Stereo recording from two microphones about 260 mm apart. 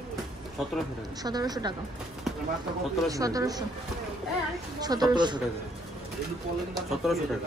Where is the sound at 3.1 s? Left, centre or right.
Centre.